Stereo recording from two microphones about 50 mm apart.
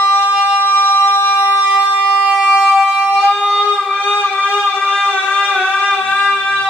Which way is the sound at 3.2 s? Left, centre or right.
Centre.